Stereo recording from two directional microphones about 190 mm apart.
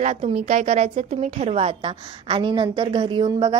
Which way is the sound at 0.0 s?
35° right (ahead or behind).